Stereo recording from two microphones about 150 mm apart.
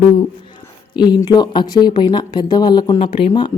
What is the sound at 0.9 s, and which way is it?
Speech, 30° left (ahead or behind).